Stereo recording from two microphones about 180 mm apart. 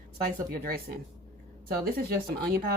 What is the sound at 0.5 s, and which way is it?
Speech, 55° right (ahead or behind).